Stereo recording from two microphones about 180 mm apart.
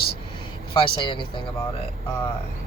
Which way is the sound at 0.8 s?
25° left (ahead or behind).